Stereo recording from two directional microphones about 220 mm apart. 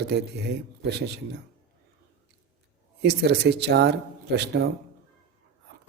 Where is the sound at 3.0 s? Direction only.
50° right (ahead or behind).